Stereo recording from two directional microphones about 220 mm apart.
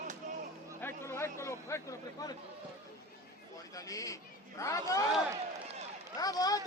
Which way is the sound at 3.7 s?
15° left (ahead or behind).